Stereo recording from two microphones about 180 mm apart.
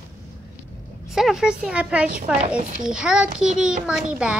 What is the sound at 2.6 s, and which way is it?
Speech, 45° right (ahead or behind).